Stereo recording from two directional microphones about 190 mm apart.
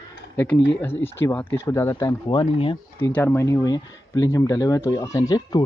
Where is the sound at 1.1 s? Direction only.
10° left (ahead or behind); by 2.8 s 25° left (ahead or behind).